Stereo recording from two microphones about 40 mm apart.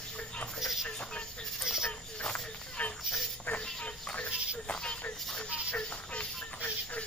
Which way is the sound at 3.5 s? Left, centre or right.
Left.